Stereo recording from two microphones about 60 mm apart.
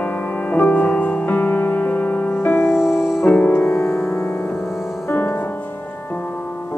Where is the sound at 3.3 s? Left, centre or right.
Left.